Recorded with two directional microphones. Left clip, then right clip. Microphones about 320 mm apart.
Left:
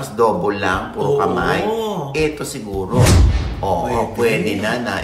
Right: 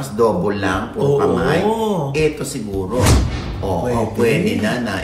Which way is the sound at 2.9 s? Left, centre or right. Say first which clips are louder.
Left 1 dB; centre.